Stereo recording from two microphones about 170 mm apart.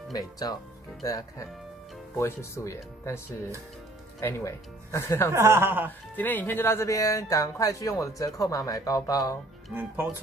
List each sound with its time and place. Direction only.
0.1 s speech: 20° left (ahead or behind)
4.2 s speech: 15° left (ahead or behind)
5.3 s speech: 15° right (ahead or behind)
6.1 s speech: 10° left (ahead or behind)
9.8 s speech: 10° right (ahead or behind)